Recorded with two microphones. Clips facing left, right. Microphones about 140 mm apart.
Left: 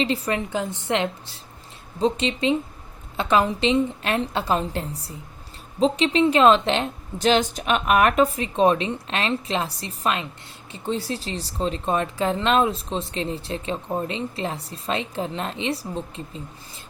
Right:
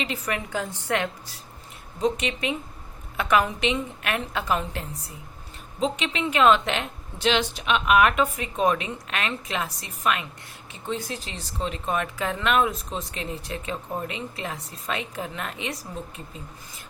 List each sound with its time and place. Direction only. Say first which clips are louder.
0.0 s a woman's voice: left 6 dB; 30° left (ahead or behind)